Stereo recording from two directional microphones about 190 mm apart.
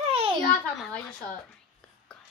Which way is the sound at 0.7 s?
Centre (ahead or behind).